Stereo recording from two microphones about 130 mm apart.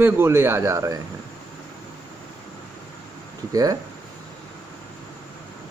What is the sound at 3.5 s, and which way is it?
Speech, 25° right (ahead or behind).